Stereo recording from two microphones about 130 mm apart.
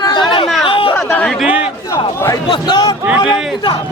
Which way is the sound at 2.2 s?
30° left (ahead or behind).